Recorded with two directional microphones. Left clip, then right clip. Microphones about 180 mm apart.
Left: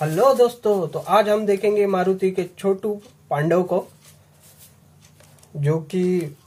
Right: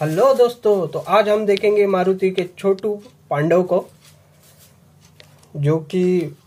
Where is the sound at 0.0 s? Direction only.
20° right (ahead or behind).